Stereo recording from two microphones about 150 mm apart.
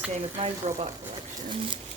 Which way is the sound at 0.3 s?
40° right (ahead or behind).